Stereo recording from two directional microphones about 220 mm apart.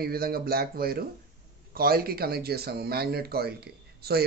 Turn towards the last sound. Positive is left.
turn(degrees=-45)  # may be behind; listen again after turning